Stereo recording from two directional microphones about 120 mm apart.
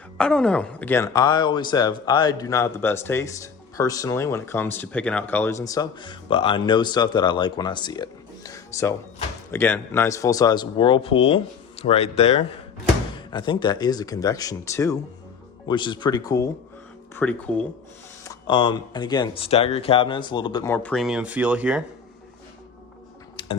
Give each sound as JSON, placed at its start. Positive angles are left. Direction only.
{"t": 0.2, "sound": "a woman's voice", "side_deg": 5}
{"t": 1.1, "sound": "speech", "side_deg": 35}
{"t": 13.3, "sound": "speech", "side_deg": 40}
{"t": 15.7, "sound": "speech", "side_deg": 40}
{"t": 17.2, "sound": "a woman's voice", "side_deg": 10}
{"t": 18.4, "sound": "speech", "side_deg": 40}
{"t": 19.3, "sound": "speech", "side_deg": 50}
{"t": 20.7, "sound": "a woman's voice", "side_deg": 15}
{"t": 20.9, "sound": "speech", "side_deg": 0}
{"t": 23.4, "sound": "typing", "side_deg": 40}